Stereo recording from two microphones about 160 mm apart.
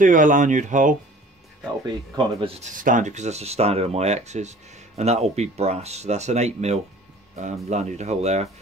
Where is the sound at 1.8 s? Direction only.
25° right (ahead or behind).